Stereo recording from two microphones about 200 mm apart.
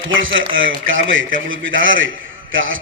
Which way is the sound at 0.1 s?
75° right (ahead or behind).